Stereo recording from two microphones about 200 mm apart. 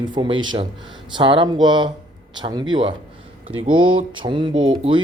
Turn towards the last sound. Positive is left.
turn(degrees=-25)  # may be behind; listen again after turning